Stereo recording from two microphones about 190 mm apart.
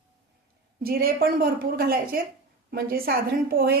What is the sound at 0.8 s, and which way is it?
A woman's voice, 55° right (ahead or behind).